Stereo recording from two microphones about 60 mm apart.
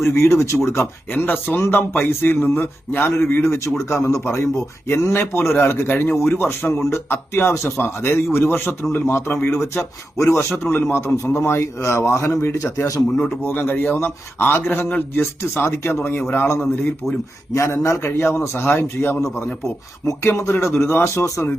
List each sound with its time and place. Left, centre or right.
0.0 s a man's voice: left
1.1 s speech: left
1.5 s a man's voice: left
3.4 s a man's voice: left
5.1 s speech: left
9.5 s a man's voice: left
10.6 s a man's voice: left
12.7 s a man's voice: left
13.4 s a man's voice: left
17.5 s a man's voice: left
18.0 s a man's voice: left
19.6 s a man's voice: left